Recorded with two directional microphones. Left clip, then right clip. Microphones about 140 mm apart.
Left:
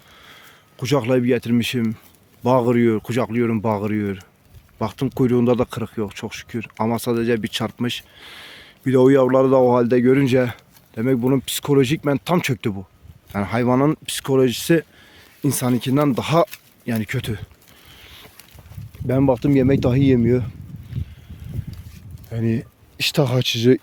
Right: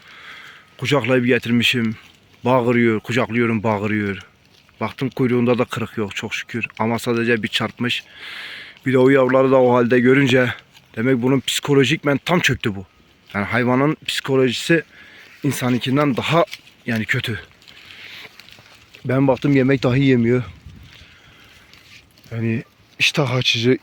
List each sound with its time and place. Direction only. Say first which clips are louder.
0.1 s a sound: right 7 dB; 25° left (ahead or behind)
2.4 s speech: right 1 dB; 25° left (ahead or behind)
4.8 s speech: even; 35° left (ahead or behind)
5.6 s speech: right 2 dB; 15° left (ahead or behind)
17.9 s boat: right 7 dB; 35° left (ahead or behind)
19.0 s speech: right 1 dB; 15° left (ahead or behind)
22.3 s speech: even; 35° left (ahead or behind)
23.0 s speech: right 2 dB; 55° left (ahead or behind)